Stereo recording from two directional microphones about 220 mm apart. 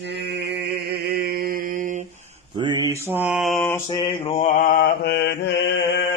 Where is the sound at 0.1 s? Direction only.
50° right (ahead or behind).